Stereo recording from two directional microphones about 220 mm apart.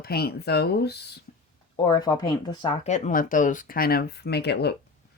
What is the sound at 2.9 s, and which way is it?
Speech, 30° left (ahead or behind).